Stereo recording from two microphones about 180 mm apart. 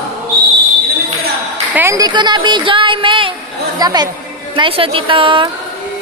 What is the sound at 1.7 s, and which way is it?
Speech, 15° right (ahead or behind).